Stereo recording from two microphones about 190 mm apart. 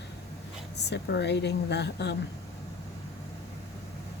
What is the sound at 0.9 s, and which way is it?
A woman's voice, 60° left (ahead or behind).